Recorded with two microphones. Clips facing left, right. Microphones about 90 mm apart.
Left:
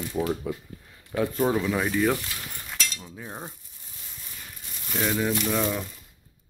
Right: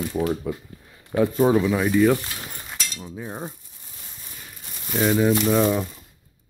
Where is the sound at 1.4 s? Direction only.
10° right (ahead or behind).